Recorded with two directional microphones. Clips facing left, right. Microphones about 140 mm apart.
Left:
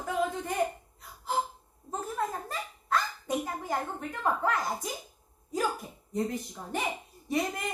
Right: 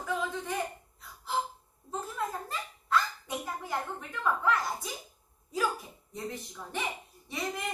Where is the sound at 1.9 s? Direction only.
45° left (ahead or behind).